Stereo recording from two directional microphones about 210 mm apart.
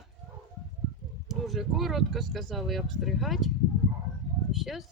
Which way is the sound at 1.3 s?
Centre (ahead or behind).